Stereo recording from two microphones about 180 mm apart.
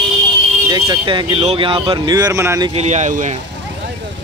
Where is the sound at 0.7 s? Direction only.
25° right (ahead or behind).